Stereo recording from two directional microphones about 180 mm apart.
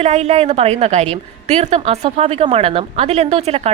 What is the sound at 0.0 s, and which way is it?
Speech, 35° right (ahead or behind).